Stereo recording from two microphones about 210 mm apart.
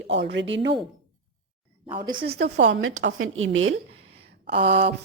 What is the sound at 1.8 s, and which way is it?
Speech, 20° right (ahead or behind).